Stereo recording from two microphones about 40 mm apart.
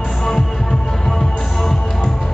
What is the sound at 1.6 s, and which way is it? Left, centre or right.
Music, centre.